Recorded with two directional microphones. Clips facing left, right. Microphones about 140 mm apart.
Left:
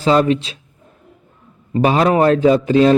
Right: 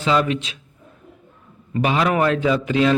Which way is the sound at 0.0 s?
40° left (ahead or behind).